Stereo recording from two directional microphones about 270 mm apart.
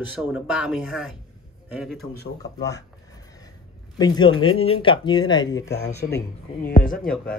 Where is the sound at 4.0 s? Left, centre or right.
Centre.